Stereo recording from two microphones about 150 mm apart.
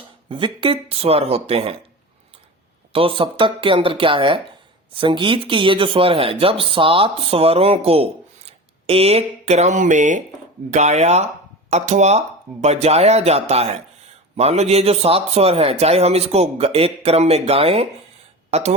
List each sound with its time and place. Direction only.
0.3 s speech: 35° right (ahead or behind)
2.9 s a man's voice: 35° right (ahead or behind)